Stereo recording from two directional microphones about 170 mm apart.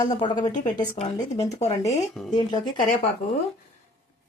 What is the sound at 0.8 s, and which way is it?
Speech, 35° left (ahead or behind).